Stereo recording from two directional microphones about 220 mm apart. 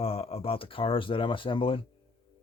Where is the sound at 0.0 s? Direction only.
25° left (ahead or behind).